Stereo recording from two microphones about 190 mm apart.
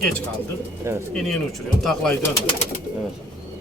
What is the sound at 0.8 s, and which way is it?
Speech, 15° right (ahead or behind).